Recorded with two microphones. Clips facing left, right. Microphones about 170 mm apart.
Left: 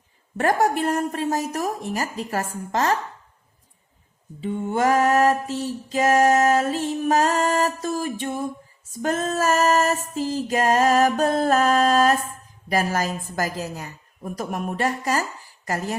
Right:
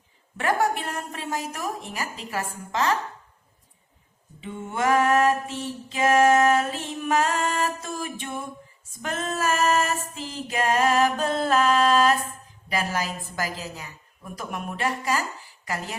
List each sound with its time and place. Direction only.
0.3 s a woman's voice: 40° left (ahead or behind)
4.4 s music: 35° left (ahead or behind)
12.6 s a woman's voice: 45° left (ahead or behind)